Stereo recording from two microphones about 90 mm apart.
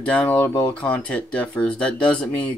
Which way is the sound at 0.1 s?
15° left (ahead or behind).